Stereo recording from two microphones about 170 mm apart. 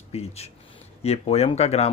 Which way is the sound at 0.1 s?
40° left (ahead or behind).